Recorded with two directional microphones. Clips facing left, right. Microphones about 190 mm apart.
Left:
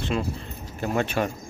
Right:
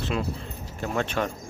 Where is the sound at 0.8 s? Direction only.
10° left (ahead or behind).